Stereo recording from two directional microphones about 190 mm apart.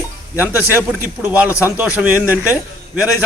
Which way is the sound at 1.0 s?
10° right (ahead or behind).